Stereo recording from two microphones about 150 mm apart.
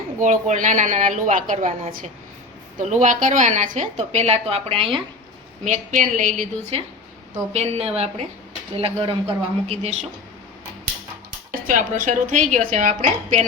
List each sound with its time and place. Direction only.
0.2 s a woman's voice: 55° right (ahead or behind); by 5.0 s 35° right (ahead or behind)
5.6 s a woman's voice: 55° right (ahead or behind)
11.6 s a woman's voice: 60° right (ahead or behind)